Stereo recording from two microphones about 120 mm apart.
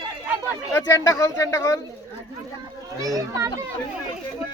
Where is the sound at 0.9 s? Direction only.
25° left (ahead or behind).